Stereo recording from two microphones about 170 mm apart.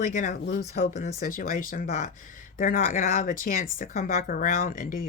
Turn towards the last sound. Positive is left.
turn(degrees=55)  # may be behind; listen again after turning